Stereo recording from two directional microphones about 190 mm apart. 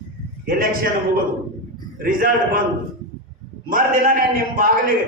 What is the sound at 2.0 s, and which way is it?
Speech, 50° right (ahead or behind).